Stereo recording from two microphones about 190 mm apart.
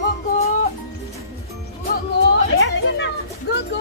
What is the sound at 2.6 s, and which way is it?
Chatter, 70° left (ahead or behind).